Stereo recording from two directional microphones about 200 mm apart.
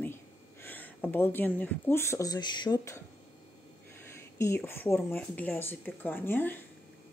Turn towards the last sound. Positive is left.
turn(degrees=10)  # may be behind; listen again after turning